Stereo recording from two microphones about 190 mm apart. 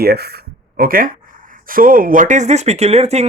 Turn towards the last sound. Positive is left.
turn(degrees=-35)  # may be behind; listen again after turning